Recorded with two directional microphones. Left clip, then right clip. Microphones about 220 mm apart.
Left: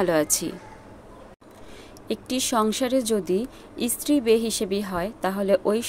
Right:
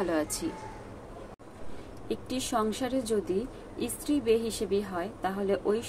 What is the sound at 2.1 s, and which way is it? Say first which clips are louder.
A woman's voice: left 6 dB; 45° left (ahead or behind).